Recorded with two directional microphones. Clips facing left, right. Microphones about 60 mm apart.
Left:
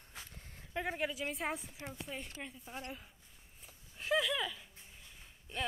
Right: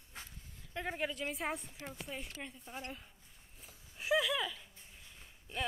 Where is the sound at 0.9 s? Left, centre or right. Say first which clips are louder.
Right 1 dB; centre.